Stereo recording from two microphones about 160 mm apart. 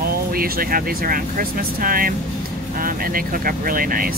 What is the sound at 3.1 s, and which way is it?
Speech, 65° right (ahead or behind).